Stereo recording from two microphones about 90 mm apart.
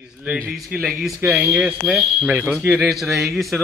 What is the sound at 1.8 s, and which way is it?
Speech, centre (ahead or behind).